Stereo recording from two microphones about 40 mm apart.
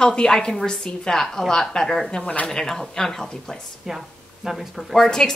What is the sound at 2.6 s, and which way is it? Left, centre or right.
A woman's voice, centre.